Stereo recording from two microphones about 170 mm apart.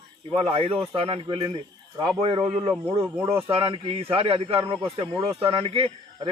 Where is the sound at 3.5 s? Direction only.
35° right (ahead or behind).